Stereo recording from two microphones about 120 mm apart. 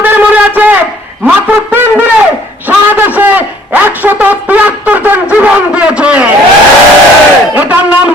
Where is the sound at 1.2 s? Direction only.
15° right (ahead or behind).